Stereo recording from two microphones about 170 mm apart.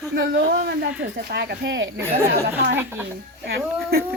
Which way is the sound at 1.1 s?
85° right.